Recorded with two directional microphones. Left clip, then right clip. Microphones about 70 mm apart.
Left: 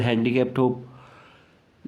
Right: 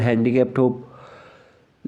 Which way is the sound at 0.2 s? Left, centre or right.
Right.